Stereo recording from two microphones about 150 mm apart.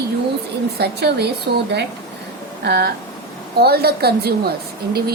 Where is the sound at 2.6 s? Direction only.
90° right.